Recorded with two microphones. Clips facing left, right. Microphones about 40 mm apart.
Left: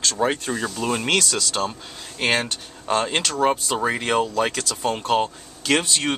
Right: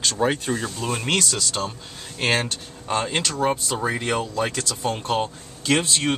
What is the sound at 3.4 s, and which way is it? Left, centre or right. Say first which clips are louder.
Speech: left 4 dB; left.